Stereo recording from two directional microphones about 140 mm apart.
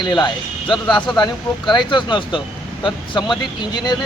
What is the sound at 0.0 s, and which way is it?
Speech, 30° left (ahead or behind).